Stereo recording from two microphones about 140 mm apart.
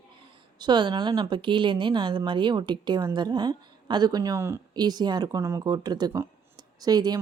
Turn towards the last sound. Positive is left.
turn(degrees=-30)  # may be behind; listen again after turning